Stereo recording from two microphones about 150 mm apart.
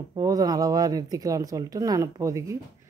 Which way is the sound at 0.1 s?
25° right (ahead or behind).